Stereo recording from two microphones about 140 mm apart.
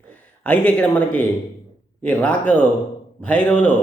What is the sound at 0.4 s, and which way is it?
Speech, 10° left (ahead or behind).